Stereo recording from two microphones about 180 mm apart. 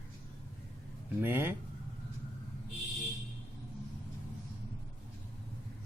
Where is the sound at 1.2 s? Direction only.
10° right (ahead or behind).